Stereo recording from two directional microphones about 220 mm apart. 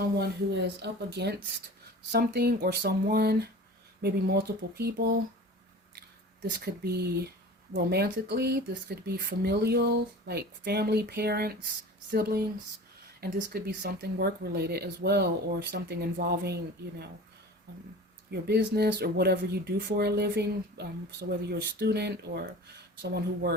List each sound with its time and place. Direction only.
0.0 s speech: 45° right (ahead or behind)
18.3 s speech: 45° right (ahead or behind)